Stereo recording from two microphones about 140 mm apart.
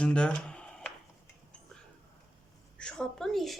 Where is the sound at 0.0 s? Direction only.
5° left (ahead or behind).